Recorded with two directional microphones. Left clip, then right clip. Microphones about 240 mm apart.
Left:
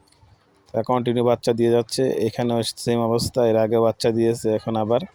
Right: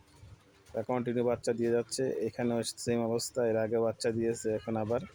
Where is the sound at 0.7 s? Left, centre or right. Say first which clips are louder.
Left 11 dB; left.